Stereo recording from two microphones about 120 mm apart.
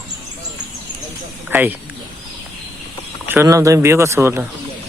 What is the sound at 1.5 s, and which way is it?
Speech, 15° right (ahead or behind).